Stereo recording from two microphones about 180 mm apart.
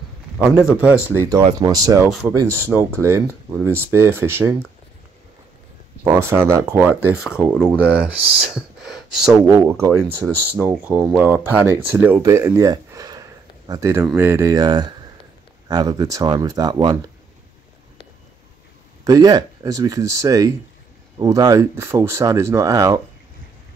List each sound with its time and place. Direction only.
0.4 s speech: 5° right (ahead or behind)
6.0 s speech: 15° right (ahead or behind)
19.0 s speech: 20° right (ahead or behind)